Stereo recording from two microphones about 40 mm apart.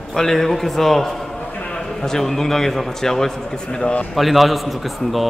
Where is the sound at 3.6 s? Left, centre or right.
Left.